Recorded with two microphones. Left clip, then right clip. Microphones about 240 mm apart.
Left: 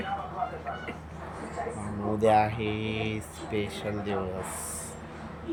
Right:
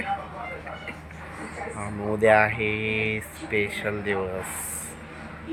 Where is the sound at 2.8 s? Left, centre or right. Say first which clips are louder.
Right 7 dB; centre.